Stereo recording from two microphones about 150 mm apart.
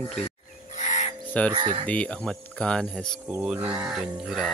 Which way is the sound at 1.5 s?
30° right (ahead or behind).